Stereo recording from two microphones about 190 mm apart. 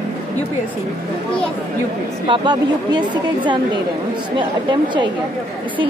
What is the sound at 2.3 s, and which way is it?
Speech, 25° right (ahead or behind).